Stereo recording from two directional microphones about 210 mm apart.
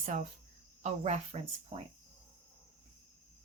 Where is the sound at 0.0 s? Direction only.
35° right (ahead or behind).